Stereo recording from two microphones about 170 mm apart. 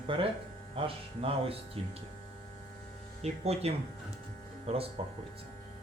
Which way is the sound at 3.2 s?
40° right (ahead or behind).